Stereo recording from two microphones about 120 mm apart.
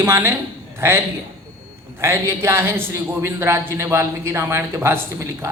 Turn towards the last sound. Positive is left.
turn(degrees=-20)  # may be behind; listen again after turning